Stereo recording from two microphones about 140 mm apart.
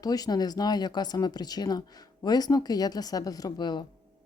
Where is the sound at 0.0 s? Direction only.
30° left (ahead or behind).